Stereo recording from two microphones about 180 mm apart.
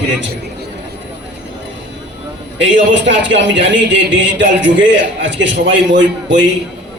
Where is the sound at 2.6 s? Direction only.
85° right.